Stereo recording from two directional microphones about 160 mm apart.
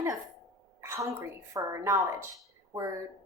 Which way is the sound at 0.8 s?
15° right (ahead or behind).